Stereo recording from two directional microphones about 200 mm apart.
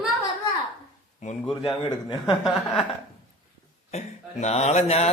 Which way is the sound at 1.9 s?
20° left (ahead or behind).